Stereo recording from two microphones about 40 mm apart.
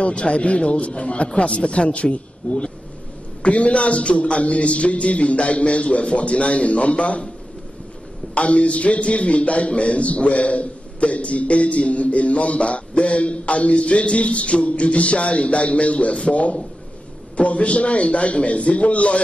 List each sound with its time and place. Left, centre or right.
0.0 s a man's voice: left
8.4 s a man's voice: left